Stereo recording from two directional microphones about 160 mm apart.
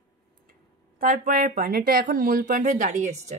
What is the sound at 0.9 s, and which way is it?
A woman's voice, 60° right (ahead or behind).